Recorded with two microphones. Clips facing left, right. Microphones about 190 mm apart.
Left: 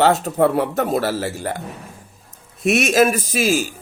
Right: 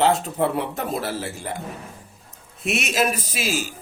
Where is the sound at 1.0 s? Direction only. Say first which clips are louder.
Left 6 dB; 75° left (ahead or behind).